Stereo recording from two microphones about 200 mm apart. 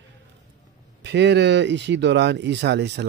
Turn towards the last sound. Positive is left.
turn(degrees=-55)  # may be behind; listen again after turning